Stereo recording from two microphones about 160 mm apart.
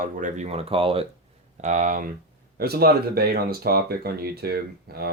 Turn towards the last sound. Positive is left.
turn(degrees=-75)  # may be behind; listen again after turning